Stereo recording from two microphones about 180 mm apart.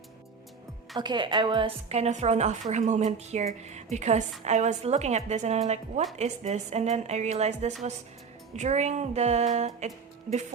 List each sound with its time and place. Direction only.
0.9 s a woman's voice: 25° right (ahead or behind)